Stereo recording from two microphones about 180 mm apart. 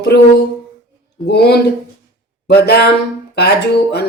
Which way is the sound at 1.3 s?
70° left (ahead or behind).